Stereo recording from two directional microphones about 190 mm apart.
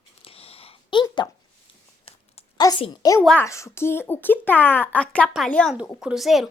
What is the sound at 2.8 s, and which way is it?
Speech, 20° left (ahead or behind).